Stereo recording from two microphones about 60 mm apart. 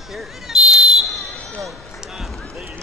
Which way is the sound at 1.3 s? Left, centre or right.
Centre.